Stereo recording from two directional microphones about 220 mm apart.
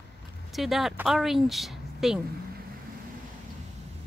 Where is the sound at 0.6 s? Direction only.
Centre (ahead or behind).